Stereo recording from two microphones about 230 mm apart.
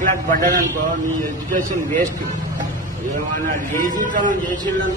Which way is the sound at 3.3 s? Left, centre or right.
Right.